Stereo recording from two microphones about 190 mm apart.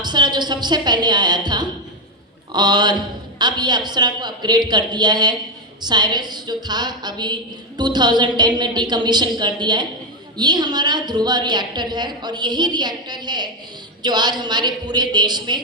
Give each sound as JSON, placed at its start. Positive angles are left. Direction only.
{"t": 0.0, "sound": "a woman's voice", "side_deg": -20}